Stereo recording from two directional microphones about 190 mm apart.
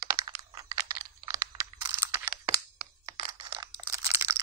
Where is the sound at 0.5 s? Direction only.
20° right (ahead or behind).